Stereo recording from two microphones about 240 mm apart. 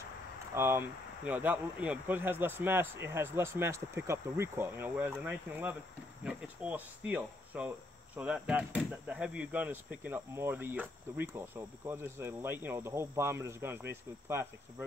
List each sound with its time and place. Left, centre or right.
0.6 s speech: centre
6.2 s cricket: centre
8.2 s speech: centre